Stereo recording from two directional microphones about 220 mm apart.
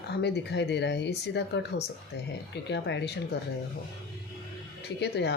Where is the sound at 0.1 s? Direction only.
50° left (ahead or behind).